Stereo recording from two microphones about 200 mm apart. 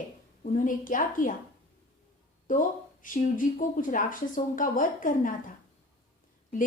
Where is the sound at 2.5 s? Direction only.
40° left (ahead or behind).